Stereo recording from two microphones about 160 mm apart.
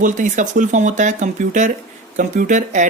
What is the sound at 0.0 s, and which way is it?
Speech, 55° right (ahead or behind).